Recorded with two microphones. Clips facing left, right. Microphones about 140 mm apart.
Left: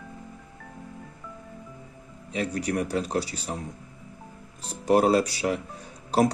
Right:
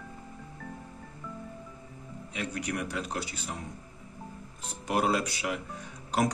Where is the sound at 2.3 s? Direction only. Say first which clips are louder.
Left 7 dB; 35° left (ahead or behind).